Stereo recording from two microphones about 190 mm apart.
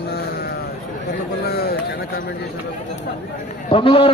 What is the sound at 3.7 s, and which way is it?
Speech, 30° left (ahead or behind).